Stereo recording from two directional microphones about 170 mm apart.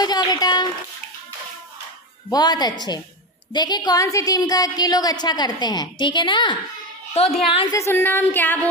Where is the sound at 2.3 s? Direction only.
25° left (ahead or behind).